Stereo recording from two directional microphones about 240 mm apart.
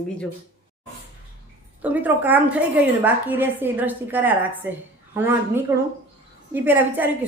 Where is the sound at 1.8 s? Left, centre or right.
Centre.